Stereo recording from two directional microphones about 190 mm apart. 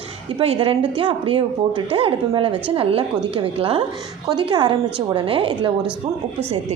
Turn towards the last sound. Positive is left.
turn(degrees=-25)  # may be behind; listen again after turning